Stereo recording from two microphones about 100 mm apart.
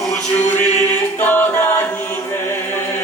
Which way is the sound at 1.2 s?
20° left (ahead or behind).